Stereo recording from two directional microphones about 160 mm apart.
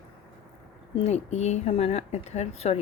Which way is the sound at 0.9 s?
40° left (ahead or behind).